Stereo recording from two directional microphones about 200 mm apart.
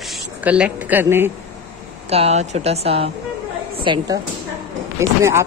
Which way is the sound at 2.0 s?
30° right (ahead or behind).